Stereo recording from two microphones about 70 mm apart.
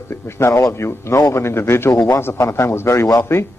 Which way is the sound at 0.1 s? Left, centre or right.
Left.